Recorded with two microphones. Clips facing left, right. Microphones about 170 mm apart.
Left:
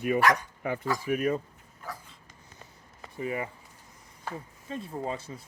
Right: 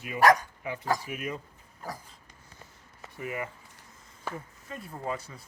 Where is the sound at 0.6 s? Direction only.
50° left (ahead or behind).